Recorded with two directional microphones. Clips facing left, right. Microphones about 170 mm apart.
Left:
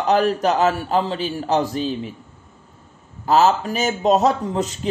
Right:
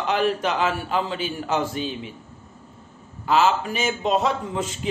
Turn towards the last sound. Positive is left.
turn(degrees=40)  # may be behind; listen again after turning